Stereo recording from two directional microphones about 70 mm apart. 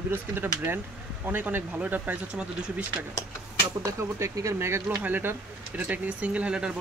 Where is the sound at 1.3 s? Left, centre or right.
Right.